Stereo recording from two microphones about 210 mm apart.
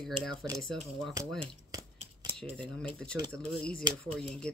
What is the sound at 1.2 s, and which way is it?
Speech, 15° right (ahead or behind).